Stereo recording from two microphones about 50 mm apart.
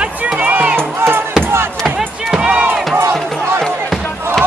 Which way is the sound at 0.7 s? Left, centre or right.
Right.